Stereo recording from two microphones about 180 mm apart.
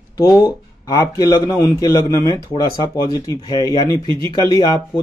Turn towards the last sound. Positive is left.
turn(degrees=25)  # may be behind; listen again after turning